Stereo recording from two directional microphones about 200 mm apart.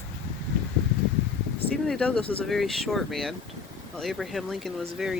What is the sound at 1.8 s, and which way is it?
Speech, 5° left (ahead or behind).